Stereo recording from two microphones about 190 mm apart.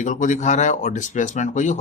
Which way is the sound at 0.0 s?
40° left (ahead or behind).